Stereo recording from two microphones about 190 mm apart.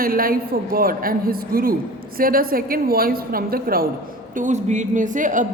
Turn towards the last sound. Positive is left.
turn(degrees=-40)  # may be behind; listen again after turning